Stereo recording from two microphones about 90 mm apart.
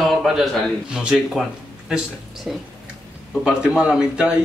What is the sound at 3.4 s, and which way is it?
Speech, 10° right (ahead or behind).